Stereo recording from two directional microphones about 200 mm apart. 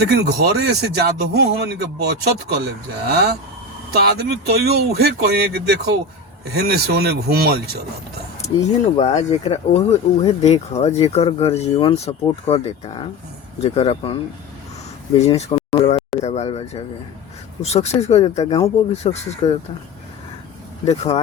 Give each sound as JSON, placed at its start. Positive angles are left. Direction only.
{"t": 0.6, "sound": "speech", "side_deg": -55}
{"t": 8.4, "sound": "speech", "side_deg": 35}
{"t": 15.2, "sound": "speech", "side_deg": 30}
{"t": 20.8, "sound": "speech", "side_deg": 30}